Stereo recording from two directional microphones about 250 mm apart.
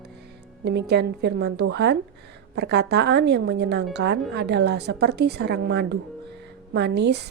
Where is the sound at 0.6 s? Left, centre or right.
Right.